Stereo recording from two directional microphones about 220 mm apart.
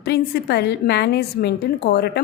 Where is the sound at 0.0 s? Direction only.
45° left (ahead or behind).